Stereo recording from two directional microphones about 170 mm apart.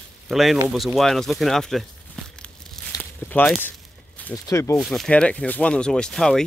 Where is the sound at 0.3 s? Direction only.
Centre (ahead or behind).